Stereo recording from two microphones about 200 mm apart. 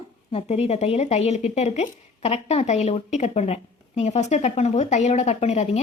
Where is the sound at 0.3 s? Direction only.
30° left (ahead or behind).